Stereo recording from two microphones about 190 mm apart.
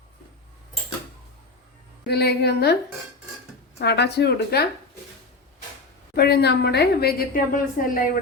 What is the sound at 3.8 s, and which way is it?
Speech, 60° left (ahead or behind).